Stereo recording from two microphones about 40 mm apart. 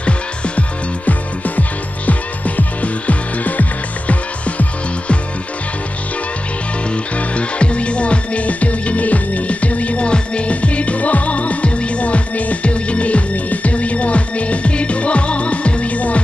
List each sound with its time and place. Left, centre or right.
0.6 s music: left
7.2 s music: left